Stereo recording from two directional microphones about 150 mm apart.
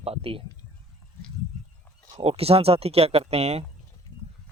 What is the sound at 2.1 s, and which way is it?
Speech, 40° right (ahead or behind).